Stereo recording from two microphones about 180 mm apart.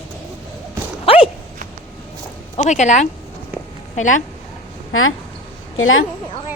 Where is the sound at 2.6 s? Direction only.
40° left (ahead or behind).